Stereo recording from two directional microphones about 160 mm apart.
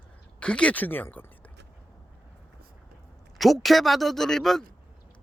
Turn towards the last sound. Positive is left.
turn(degrees=0)  # may be behind; listen again after turning